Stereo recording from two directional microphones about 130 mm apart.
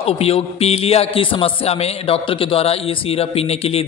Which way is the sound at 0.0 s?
50° left (ahead or behind).